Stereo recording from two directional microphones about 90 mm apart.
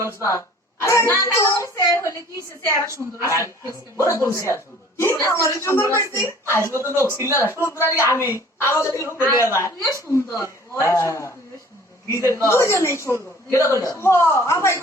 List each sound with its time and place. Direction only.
0.0 s throat clearing: 30° left (ahead or behind)
1.4 s a woman's voice: 35° left (ahead or behind)
2.6 s a woman's voice: 35° right (ahead or behind)
3.2 s a woman's voice: 35° left (ahead or behind)
7.5 s speech: 25° right (ahead or behind)
8.1 s a woman's voice: 30° left (ahead or behind)